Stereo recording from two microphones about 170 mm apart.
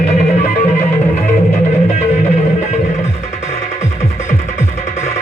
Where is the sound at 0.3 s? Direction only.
40° left (ahead or behind).